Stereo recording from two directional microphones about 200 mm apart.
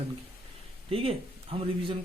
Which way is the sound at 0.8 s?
30° right (ahead or behind).